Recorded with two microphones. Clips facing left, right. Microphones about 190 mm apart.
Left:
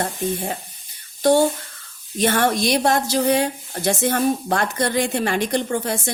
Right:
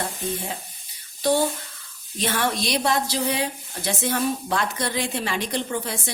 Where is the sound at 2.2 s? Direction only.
50° left (ahead or behind).